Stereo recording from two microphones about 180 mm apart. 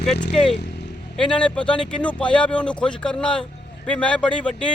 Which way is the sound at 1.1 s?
5° left (ahead or behind).